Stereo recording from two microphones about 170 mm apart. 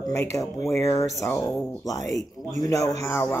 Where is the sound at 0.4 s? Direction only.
15° left (ahead or behind).